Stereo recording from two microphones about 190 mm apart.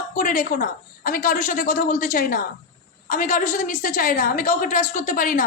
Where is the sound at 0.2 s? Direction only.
45° left (ahead or behind).